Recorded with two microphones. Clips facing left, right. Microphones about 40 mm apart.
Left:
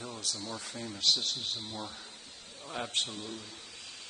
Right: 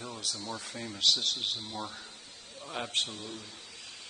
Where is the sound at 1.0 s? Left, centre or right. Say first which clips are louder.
Right 2 dB; right.